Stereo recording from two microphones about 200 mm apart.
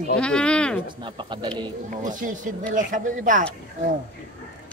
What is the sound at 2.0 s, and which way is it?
Speech, 40° right (ahead or behind).